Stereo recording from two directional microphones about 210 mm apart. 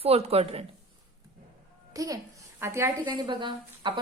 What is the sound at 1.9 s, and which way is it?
A woman's voice, 15° right (ahead or behind).